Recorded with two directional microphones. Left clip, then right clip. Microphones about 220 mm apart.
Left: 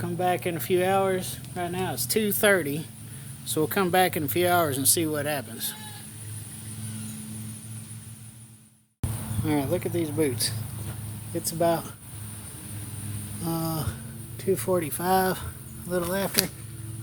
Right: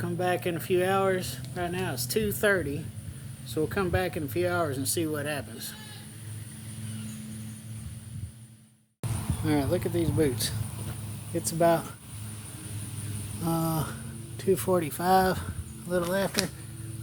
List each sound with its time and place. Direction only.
0.0 s speech: 15° left (ahead or behind)
9.5 s speech: centre (ahead or behind)
11.3 s speech: 15° right (ahead or behind)
13.4 s speech: 10° right (ahead or behind)